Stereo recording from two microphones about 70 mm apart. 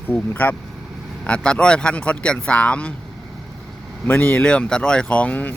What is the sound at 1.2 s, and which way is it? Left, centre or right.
Speech, centre.